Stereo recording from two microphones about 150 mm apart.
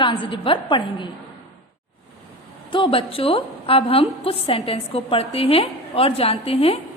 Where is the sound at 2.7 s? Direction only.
35° left (ahead or behind).